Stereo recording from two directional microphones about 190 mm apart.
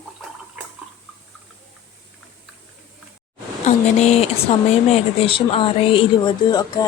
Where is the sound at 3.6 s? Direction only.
35° left (ahead or behind).